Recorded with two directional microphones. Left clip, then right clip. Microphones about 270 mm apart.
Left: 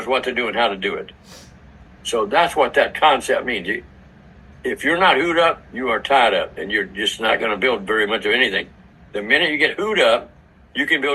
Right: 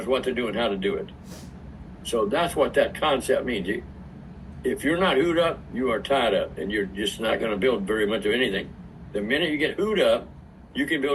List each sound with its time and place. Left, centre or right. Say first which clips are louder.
0.0 s a man's voice: left 5 dB; centre